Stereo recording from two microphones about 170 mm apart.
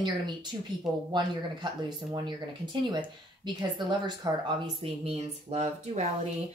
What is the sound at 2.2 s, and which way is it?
Speech, 25° right (ahead or behind).